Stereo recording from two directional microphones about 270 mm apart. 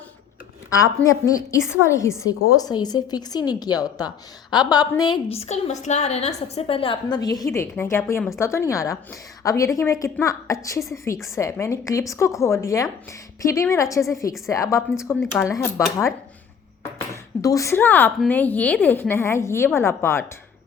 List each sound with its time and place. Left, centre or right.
0.7 s a woman's voice: centre
17.4 s a woman's voice: centre